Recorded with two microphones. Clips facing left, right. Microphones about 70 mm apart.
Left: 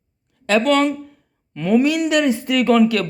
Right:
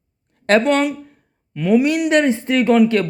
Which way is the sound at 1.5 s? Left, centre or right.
Centre.